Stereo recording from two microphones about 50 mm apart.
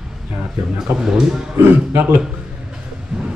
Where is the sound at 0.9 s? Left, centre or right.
Right.